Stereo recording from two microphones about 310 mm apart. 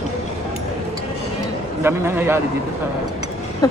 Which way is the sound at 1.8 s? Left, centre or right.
Centre.